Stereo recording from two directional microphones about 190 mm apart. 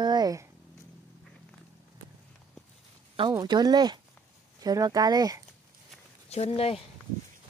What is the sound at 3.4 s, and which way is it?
A woman's voice, 20° right (ahead or behind).